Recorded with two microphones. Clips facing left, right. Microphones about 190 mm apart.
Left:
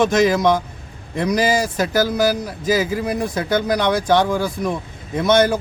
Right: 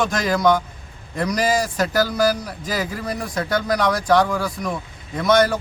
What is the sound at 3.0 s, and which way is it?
Speech, 20° left (ahead or behind).